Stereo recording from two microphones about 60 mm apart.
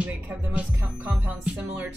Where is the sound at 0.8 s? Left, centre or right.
Right.